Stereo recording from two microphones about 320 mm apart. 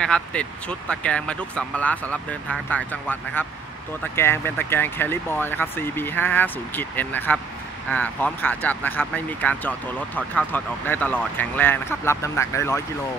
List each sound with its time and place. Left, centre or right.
0.0 s speech: centre